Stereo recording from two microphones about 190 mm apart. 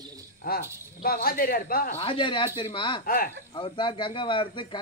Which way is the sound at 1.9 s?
30° left (ahead or behind).